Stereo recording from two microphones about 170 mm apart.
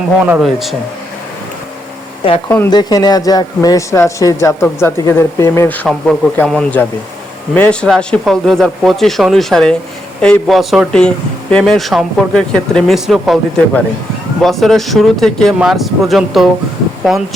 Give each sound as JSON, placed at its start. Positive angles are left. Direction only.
{"t": 0.2, "sound": "speech", "side_deg": -5}
{"t": 2.6, "sound": "a man's voice", "side_deg": 25}